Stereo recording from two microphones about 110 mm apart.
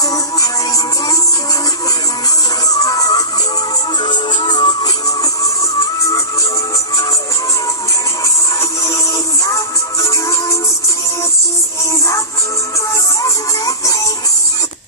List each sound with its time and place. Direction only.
2.7 s music: 35° left (ahead or behind)
8.8 s music: 30° left (ahead or behind)
13.2 s music: 30° left (ahead or behind)